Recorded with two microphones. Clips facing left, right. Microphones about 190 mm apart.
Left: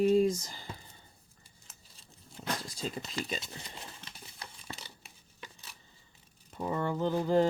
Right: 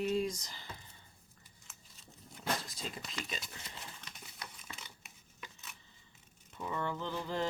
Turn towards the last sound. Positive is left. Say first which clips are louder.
# left 10 dB
turn(degrees=40)  # may be behind; listen again after turning